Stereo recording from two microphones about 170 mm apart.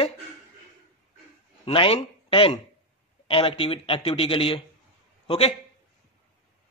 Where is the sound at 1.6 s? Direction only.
35° left (ahead or behind).